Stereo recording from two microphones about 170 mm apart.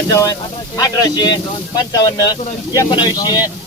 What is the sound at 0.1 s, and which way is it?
Speech, 20° left (ahead or behind).